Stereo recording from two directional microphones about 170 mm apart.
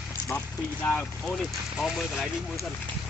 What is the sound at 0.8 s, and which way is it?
Speech, 5° left (ahead or behind).